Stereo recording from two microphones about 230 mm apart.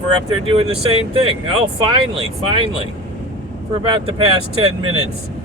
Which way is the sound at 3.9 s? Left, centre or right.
Right.